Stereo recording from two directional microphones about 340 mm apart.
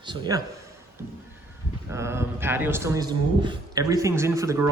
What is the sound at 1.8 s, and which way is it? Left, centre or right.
A man's voice, centre.